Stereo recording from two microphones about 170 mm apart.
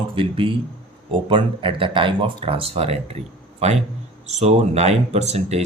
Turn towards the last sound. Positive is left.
turn(degrees=-40)  # may be behind; listen again after turning